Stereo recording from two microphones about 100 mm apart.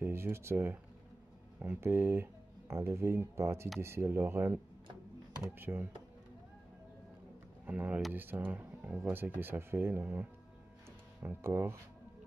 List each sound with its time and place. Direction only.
0.0 s speech: 25° right (ahead or behind)
7.6 s speech: 15° right (ahead or behind)
11.2 s speech: 25° right (ahead or behind)